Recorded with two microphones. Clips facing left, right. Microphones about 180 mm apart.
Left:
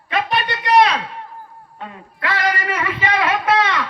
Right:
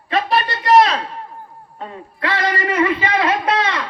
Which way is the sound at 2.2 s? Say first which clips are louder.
Right 1 dB; 25° right (ahead or behind).